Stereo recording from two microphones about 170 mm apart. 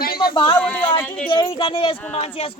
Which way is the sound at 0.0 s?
60° left (ahead or behind).